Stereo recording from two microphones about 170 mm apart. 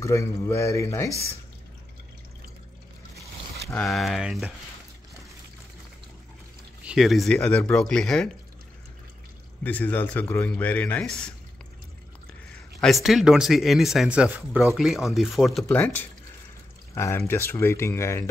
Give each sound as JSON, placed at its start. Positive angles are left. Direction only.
{"t": 0.0, "sound": "speech", "side_deg": 15}
{"t": 3.7, "sound": "speech", "side_deg": 0}
{"t": 6.8, "sound": "speech", "side_deg": -5}
{"t": 9.6, "sound": "speech", "side_deg": 10}
{"t": 12.8, "sound": "speech", "side_deg": 0}
{"t": 15.7, "sound": "speech", "side_deg": 10}